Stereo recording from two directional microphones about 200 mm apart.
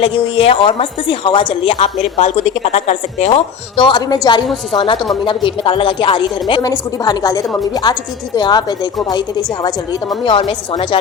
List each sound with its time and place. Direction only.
0.0 s a woman's voice: 30° left (ahead or behind)
10.2 s speech: 25° left (ahead or behind)